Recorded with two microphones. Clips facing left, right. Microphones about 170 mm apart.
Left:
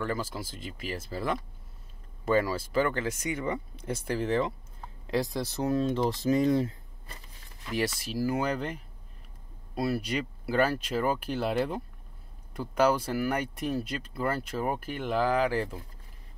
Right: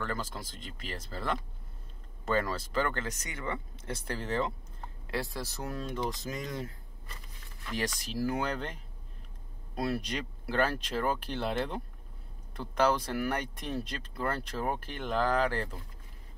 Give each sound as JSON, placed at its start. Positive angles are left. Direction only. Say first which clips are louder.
{"t": 0.0, "sound": "speech", "louder": "left 4 dB", "side_deg": 5}
{"t": 7.7, "sound": "speech", "louder": "left 4 dB", "side_deg": 10}
{"t": 9.8, "sound": "speech", "louder": "left 3 dB", "side_deg": 5}